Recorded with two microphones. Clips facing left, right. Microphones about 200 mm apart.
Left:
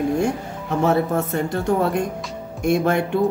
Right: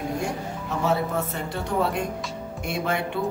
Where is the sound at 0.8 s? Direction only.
50° left (ahead or behind).